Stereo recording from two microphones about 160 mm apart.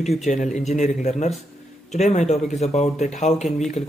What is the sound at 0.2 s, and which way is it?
Speech, 50° left (ahead or behind).